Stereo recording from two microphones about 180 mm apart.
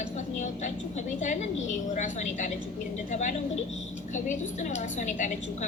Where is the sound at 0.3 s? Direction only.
40° left (ahead or behind).